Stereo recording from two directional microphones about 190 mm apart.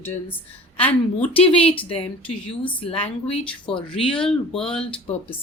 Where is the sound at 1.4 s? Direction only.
30° left (ahead or behind).